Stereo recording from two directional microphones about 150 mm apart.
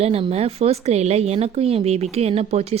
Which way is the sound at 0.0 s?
40° right (ahead or behind).